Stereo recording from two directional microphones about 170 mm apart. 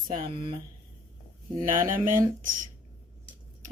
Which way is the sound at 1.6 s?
50° right (ahead or behind).